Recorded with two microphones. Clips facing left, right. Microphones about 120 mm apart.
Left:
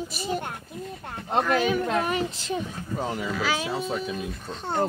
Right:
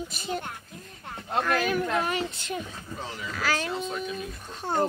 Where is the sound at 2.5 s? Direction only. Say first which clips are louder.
Left 4 dB; 45° left (ahead or behind).